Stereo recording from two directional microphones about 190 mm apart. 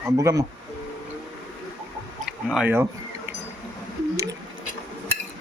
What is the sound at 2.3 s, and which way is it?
Tick-tock, 5° right (ahead or behind).